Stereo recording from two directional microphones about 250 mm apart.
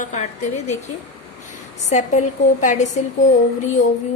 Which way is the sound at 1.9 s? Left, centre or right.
Left.